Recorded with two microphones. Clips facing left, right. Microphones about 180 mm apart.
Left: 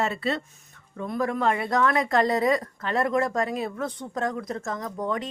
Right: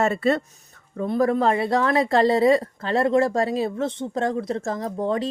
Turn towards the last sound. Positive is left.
turn(degrees=-30)  # may be behind; listen again after turning